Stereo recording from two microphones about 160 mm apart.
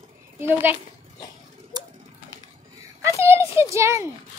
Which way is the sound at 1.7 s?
25° right (ahead or behind).